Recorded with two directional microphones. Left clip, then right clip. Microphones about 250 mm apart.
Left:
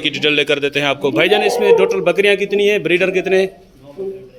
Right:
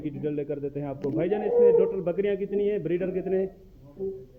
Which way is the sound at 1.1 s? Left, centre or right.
Centre.